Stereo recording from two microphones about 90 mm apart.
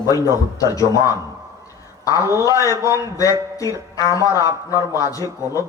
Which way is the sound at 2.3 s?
40° left (ahead or behind).